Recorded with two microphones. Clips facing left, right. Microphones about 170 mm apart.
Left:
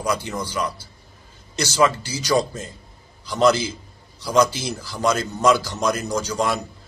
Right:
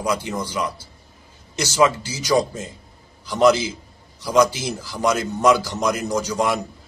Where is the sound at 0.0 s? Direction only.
20° right (ahead or behind).